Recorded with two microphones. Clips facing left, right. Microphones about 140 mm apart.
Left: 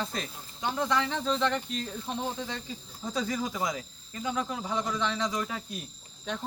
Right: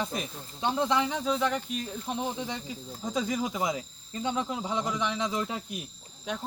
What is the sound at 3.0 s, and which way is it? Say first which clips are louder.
Speech: right 1 dB; 20° right (ahead or behind).